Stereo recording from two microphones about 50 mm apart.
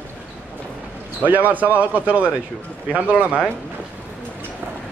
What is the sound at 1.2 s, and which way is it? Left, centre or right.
Speech, right.